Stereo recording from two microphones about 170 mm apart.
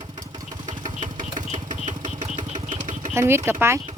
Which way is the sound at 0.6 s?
50° right (ahead or behind).